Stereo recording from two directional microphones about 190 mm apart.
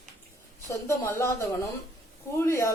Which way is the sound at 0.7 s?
15° left (ahead or behind).